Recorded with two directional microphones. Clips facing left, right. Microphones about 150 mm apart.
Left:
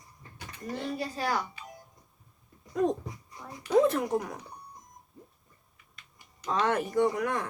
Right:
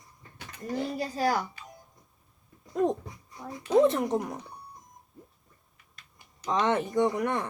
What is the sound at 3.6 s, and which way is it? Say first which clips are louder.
Speech: right 2 dB; 20° right (ahead or behind).